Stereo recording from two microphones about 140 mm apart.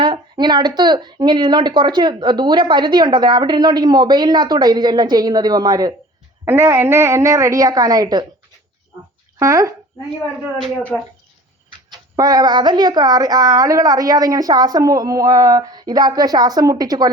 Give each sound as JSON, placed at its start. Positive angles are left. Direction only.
{"t": 0.0, "sound": "speech", "side_deg": -35}
{"t": 9.4, "sound": "speech", "side_deg": -25}
{"t": 10.9, "sound": "speech", "side_deg": 5}
{"t": 11.9, "sound": "speech", "side_deg": -30}